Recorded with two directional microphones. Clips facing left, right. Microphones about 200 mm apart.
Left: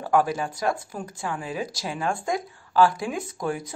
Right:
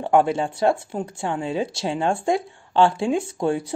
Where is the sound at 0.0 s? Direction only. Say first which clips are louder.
Right 4 dB; 25° right (ahead or behind).